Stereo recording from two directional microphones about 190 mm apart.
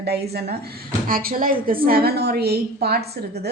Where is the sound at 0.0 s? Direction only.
60° right (ahead or behind).